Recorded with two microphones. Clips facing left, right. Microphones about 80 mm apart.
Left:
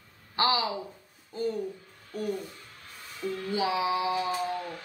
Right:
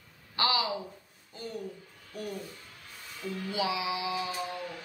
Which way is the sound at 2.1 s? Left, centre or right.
Left.